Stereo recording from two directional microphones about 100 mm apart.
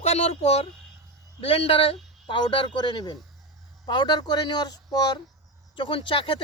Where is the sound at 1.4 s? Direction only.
70° left (ahead or behind); by 5.2 s 40° left (ahead or behind).